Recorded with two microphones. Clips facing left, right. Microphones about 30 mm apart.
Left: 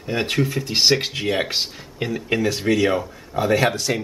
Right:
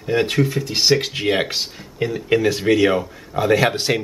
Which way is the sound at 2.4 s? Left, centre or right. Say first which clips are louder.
Right 2 dB; centre.